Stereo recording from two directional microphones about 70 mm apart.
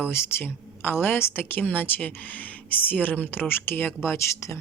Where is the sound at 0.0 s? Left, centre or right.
Left.